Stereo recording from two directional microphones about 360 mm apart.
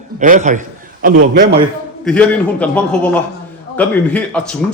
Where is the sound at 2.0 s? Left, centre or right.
Centre.